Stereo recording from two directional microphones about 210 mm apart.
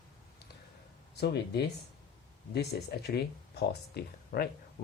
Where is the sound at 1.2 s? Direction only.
50° left (ahead or behind).